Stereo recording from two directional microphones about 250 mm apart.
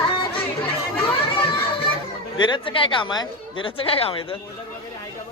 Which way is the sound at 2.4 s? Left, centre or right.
Centre.